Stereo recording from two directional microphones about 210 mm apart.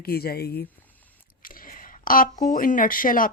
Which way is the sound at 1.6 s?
40° left (ahead or behind).